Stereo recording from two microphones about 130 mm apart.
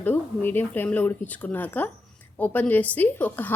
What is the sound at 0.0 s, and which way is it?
Speech, 15° left (ahead or behind).